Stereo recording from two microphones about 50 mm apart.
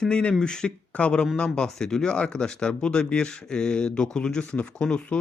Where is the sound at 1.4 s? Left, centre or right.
Centre.